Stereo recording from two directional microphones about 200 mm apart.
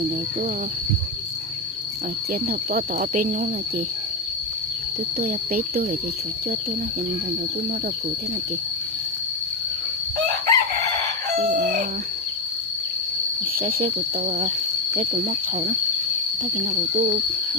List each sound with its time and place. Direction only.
2.3 s cricket: 45° right (ahead or behind)
5.2 s cricket: 50° right (ahead or behind)
10.2 s chicken: 55° right (ahead or behind)
11.3 s fowl: 40° right (ahead or behind)
13.6 s speech: 45° right (ahead or behind)
16.7 s speech: 35° right (ahead or behind)